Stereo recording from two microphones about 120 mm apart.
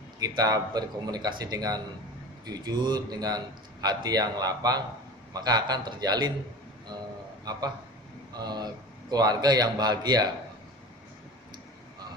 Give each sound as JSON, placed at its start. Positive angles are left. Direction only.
{"t": 0.2, "sound": "a man's voice", "side_deg": -30}
{"t": 8.3, "sound": "a man's voice", "side_deg": -35}